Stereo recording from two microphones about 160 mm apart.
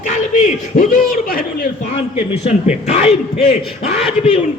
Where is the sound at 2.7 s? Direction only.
40° left (ahead or behind).